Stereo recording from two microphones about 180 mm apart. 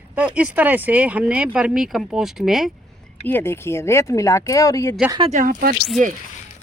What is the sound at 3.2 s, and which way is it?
Speech, 10° left (ahead or behind).